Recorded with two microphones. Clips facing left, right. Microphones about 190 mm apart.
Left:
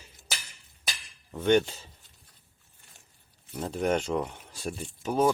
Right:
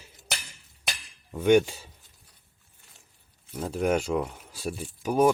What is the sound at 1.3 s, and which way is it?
Speech, 10° right (ahead or behind).